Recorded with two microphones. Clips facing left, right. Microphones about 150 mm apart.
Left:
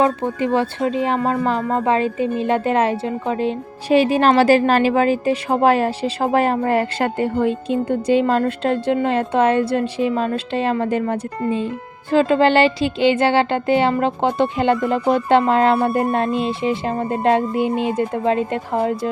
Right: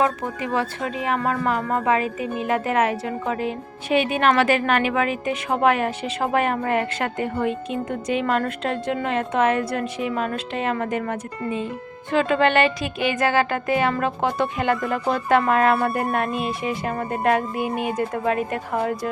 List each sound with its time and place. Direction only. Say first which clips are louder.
0.0 s speech: left 5 dB; 30° left (ahead or behind)